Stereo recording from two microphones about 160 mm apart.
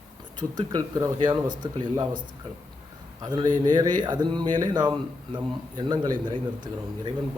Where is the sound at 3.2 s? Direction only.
25° right (ahead or behind).